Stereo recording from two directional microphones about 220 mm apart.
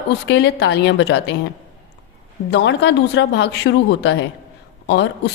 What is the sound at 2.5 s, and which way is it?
Speech, 55° left (ahead or behind).